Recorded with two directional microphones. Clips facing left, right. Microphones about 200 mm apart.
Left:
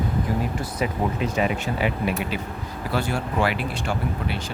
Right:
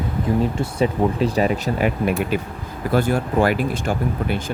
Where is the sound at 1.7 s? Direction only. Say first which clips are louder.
Right 4 dB; 50° right (ahead or behind).